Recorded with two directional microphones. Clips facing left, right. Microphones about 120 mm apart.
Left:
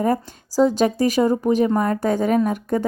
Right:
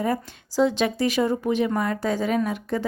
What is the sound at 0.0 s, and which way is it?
Speech, 40° left (ahead or behind).